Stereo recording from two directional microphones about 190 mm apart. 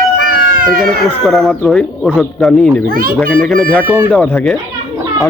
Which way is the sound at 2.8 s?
50° right (ahead or behind).